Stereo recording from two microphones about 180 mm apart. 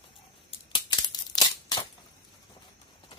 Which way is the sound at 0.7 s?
25° left (ahead or behind).